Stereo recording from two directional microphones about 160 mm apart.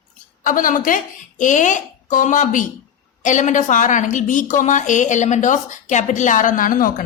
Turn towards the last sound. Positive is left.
turn(degrees=60)  # may be behind; listen again after turning